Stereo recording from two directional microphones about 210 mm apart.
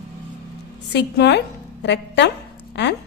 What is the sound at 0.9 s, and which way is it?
A woman's voice, 55° left (ahead or behind).